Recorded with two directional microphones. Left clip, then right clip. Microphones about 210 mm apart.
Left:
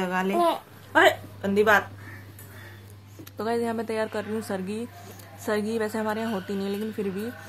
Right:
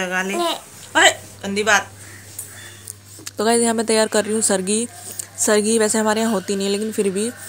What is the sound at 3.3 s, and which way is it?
A woman's voice, 25° right (ahead or behind).